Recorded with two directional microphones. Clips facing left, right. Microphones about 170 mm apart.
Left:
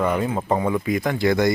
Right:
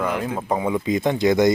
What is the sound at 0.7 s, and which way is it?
Speech, 20° right (ahead or behind).